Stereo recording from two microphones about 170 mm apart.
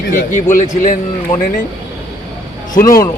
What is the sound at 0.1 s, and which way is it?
Speech, 50° left (ahead or behind).